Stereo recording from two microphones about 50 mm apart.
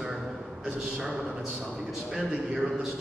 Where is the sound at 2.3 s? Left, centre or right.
Right.